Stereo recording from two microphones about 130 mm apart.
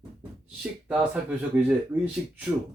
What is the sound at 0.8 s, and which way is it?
Speech, 10° right (ahead or behind).